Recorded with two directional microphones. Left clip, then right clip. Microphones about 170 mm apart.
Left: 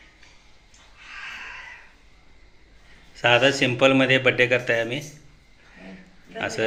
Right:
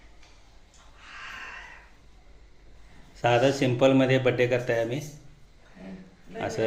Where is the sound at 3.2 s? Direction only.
5° right (ahead or behind).